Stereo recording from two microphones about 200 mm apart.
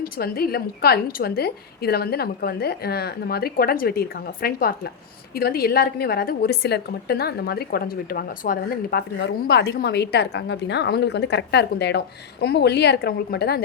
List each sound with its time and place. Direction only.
0.0 s a woman's voice: 50° left (ahead or behind)